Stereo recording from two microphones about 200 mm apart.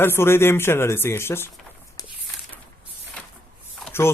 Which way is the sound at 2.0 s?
20° left (ahead or behind).